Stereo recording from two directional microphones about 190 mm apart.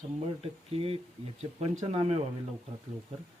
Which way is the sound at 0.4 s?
30° right (ahead or behind).